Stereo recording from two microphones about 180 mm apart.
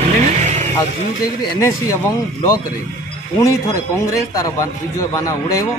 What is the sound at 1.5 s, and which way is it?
Speech, 20° left (ahead or behind).